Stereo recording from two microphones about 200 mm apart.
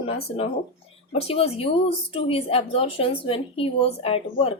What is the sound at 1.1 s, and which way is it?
Speech, 30° left (ahead or behind).